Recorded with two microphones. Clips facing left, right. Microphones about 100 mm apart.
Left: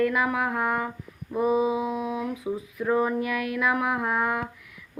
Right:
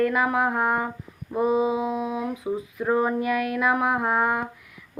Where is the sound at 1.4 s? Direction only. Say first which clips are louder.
Right 1 dB; 5° left (ahead or behind).